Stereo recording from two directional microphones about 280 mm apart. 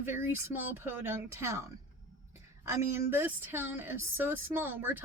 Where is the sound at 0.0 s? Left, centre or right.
Centre.